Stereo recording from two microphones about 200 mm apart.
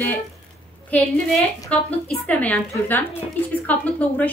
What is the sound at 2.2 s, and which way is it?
Speech, 5° left (ahead or behind).